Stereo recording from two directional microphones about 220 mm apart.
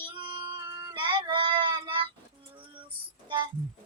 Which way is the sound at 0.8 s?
20° right (ahead or behind).